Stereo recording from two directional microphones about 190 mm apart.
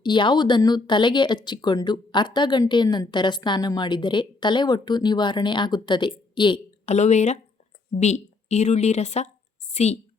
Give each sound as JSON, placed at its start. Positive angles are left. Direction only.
{"t": 0.0, "sound": "speech", "side_deg": 25}
{"t": 6.9, "sound": "speech", "side_deg": 35}